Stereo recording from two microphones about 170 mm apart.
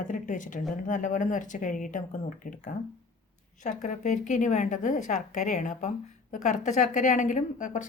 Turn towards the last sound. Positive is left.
turn(degrees=50)  # may be behind; listen again after turning